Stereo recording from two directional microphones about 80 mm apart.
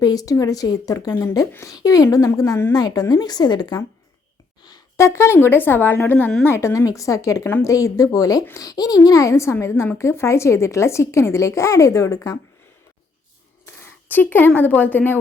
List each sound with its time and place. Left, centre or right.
0.0 s speech: left
4.9 s speech: left
6.4 s a woman's voice: left
13.7 s speech: left